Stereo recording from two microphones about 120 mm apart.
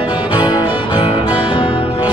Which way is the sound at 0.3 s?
40° left (ahead or behind).